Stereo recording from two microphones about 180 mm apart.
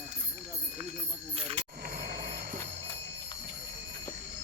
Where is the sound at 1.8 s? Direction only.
50° right (ahead or behind).